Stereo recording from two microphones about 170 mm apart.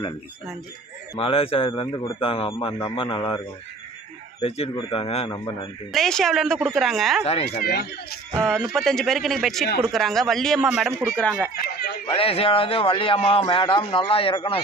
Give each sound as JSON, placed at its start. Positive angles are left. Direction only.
{"t": 1.2, "sound": "speech", "side_deg": 35}
{"t": 5.3, "sound": "a man's voice", "side_deg": 20}
{"t": 5.9, "sound": "a woman's voice", "side_deg": 0}
{"t": 7.4, "sound": "speech", "side_deg": 70}
{"t": 8.4, "sound": "a woman's voice", "side_deg": 5}
{"t": 12.1, "sound": "speech", "side_deg": 35}